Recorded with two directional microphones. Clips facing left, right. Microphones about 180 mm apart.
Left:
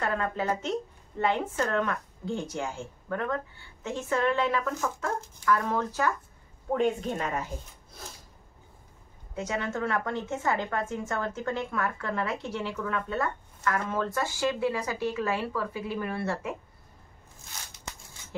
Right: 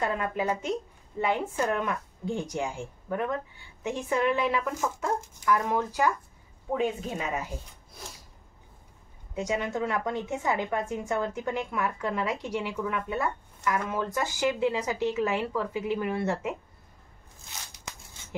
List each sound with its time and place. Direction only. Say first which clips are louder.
0.0 s a woman's voice: right 1 dB; 15° right (ahead or behind)
9.3 s a woman's voice: right 2 dB; 15° right (ahead or behind)